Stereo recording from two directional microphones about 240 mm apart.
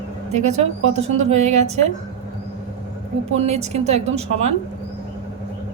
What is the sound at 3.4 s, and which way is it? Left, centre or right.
A woman's voice, right.